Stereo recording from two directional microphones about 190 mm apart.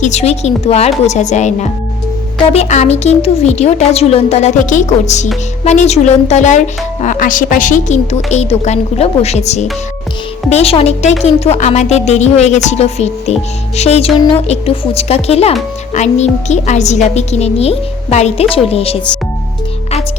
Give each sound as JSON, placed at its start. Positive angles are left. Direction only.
{"t": 0.0, "sound": "a woman's voice", "side_deg": 35}